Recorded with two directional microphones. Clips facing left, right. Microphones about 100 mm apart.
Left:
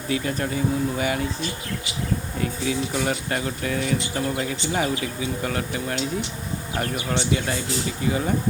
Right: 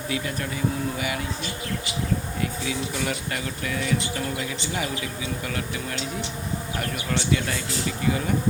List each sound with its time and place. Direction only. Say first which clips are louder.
0.1 s speech: left 6 dB; 35° left (ahead or behind)
2.4 s speech: left 3 dB; 35° left (ahead or behind)